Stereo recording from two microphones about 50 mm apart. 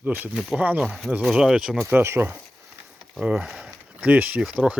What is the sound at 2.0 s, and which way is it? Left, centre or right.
Speech, right.